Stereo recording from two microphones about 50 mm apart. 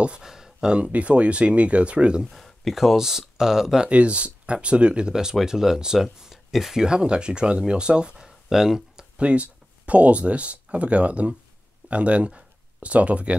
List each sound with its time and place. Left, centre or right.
0.0 s speech: centre
2.3 s speech: centre
3.9 s speech: right
8.3 s a sound: centre
9.2 s speech: right